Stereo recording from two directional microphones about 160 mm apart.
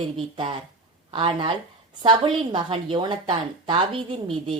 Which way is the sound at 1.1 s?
30° right (ahead or behind).